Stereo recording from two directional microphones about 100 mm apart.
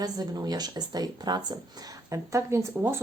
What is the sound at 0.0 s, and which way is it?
Speech, 40° right (ahead or behind).